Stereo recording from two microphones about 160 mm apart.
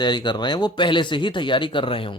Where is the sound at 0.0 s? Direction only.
25° left (ahead or behind).